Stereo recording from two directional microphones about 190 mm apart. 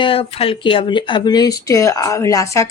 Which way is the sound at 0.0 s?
30° left (ahead or behind).